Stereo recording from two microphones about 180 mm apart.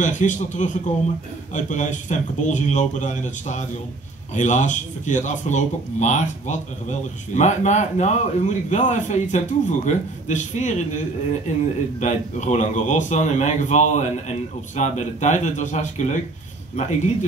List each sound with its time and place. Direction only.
0.0 s speech: 45° left (ahead or behind)